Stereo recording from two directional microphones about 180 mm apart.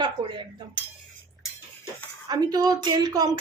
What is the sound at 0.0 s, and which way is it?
Cutlery, 25° right (ahead or behind).